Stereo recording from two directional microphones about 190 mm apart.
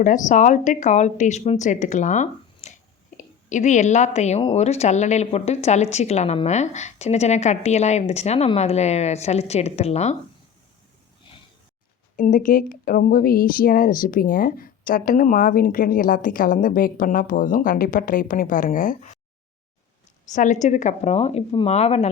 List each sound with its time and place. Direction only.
0.0 s speech: 40° left (ahead or behind)
12.1 s speech: 45° left (ahead or behind)
20.3 s speech: 40° left (ahead or behind)